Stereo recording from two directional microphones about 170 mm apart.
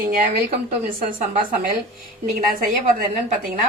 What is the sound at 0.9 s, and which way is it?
Speech, 55° right (ahead or behind).